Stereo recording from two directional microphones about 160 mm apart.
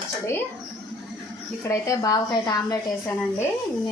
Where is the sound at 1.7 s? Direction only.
20° left (ahead or behind).